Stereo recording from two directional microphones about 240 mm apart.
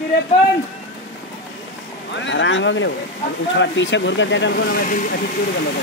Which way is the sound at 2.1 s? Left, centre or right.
Left.